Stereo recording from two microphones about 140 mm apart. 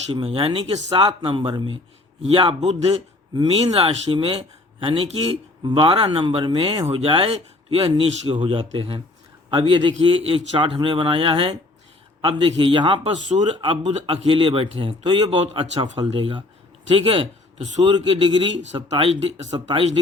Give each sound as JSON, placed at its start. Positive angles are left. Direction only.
{"t": 0.1, "sound": "a man's voice", "side_deg": -40}